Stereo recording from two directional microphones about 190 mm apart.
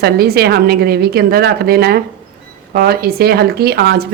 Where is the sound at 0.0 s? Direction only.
55° right (ahead or behind).